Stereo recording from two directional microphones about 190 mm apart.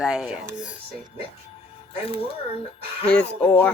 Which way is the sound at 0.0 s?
5° right (ahead or behind).